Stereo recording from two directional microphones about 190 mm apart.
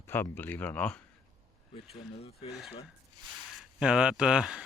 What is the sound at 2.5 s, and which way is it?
Speech, centre (ahead or behind).